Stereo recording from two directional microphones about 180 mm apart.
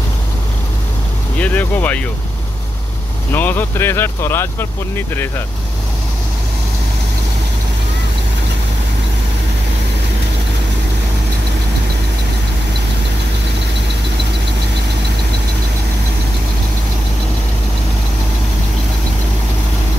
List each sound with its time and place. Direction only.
1.4 s speech: 10° left (ahead or behind)
3.3 s speech: 10° left (ahead or behind)